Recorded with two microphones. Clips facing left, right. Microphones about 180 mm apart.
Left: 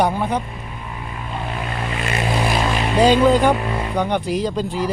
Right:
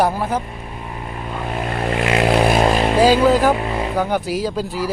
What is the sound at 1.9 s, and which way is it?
Vehicle, 70° right (ahead or behind).